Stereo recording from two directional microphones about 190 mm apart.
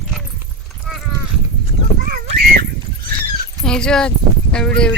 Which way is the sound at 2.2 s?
55° right (ahead or behind).